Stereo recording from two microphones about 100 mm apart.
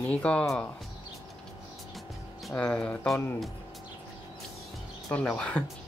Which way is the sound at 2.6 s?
10° left (ahead or behind).